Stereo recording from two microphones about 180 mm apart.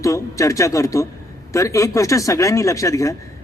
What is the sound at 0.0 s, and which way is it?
A man's voice, 15° left (ahead or behind).